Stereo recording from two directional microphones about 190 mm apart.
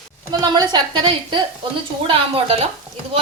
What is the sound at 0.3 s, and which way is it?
A woman's voice, 20° right (ahead or behind).